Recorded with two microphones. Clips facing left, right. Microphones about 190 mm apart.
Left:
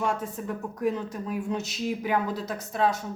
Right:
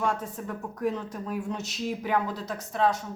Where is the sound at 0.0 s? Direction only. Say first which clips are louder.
Left 1 dB; 5° left (ahead or behind).